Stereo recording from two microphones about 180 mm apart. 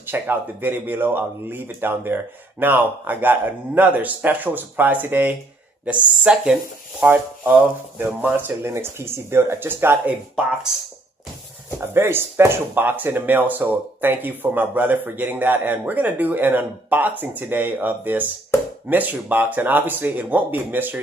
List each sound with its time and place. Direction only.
0.0 s speech: 10° right (ahead or behind)
11.8 s speech: 15° right (ahead or behind)